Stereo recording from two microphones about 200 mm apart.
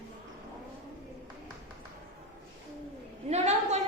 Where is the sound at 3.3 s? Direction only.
35° right (ahead or behind).